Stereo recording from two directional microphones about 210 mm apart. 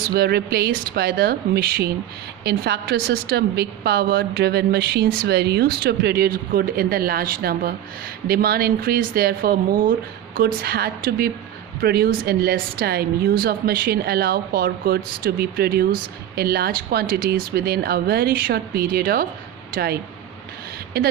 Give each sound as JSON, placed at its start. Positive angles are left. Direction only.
{"t": 0.0, "sound": "a woman's voice", "side_deg": -50}